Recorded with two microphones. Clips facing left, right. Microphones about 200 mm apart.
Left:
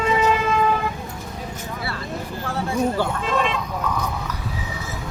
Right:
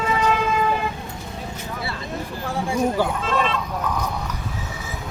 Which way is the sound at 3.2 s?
15° left (ahead or behind).